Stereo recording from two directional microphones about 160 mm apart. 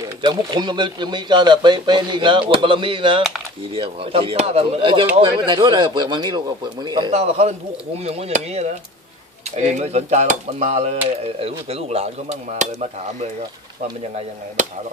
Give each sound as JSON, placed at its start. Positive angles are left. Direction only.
{"t": 0.2, "sound": "speech", "side_deg": -30}
{"t": 7.1, "sound": "speech", "side_deg": -45}